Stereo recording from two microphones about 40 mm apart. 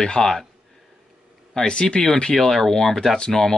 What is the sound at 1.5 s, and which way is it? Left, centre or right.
Speech, centre.